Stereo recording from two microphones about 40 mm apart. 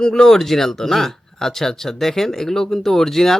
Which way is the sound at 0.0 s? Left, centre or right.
Centre.